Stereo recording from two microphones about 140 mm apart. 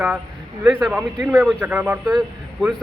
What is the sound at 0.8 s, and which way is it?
A man's voice, 5° right (ahead or behind).